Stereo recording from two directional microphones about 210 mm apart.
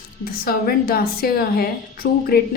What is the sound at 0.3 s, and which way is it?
A woman's voice, 45° left (ahead or behind).